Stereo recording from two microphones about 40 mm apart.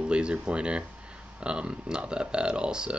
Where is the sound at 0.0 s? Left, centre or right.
Right.